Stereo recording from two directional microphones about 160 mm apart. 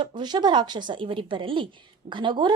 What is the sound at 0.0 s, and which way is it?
A woman's voice, 25° right (ahead or behind).